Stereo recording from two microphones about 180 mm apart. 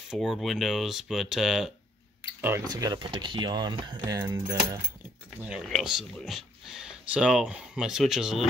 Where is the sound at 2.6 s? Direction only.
20° right (ahead or behind).